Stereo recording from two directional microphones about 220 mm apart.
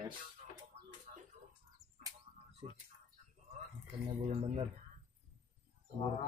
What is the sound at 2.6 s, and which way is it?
Speech, 30° right (ahead or behind).